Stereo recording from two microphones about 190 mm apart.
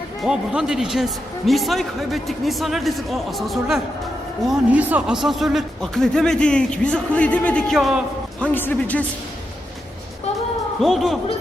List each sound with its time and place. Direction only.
0.2 s a man's voice: 5° right (ahead or behind)
10.8 s a man's voice: centre (ahead or behind)